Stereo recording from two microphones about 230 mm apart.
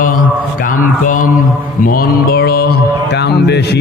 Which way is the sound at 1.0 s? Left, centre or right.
Left.